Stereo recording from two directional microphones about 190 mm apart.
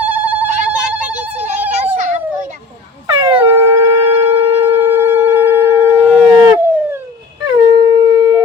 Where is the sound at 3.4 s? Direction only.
10° right (ahead or behind).